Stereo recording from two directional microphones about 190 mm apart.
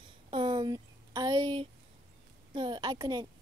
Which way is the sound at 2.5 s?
25° right (ahead or behind).